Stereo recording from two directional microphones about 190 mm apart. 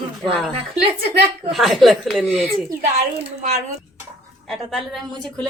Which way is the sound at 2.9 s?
35° right (ahead or behind).